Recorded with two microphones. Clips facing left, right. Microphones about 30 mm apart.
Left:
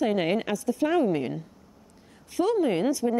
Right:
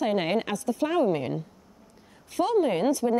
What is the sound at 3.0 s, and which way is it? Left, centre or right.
Speech, right.